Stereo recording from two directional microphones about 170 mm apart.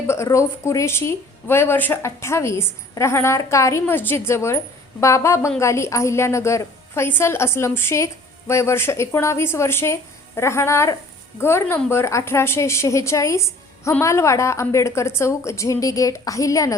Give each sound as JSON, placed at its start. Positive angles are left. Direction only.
{"t": 0.1, "sound": "a woman's voice", "side_deg": 15}